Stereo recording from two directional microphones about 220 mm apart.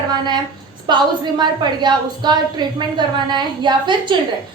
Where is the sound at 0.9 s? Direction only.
20° right (ahead or behind).